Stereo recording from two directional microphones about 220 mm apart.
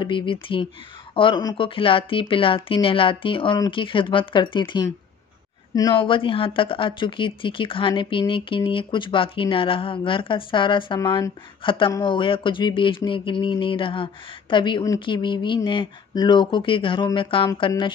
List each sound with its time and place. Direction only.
0.0 s speech: 20° left (ahead or behind)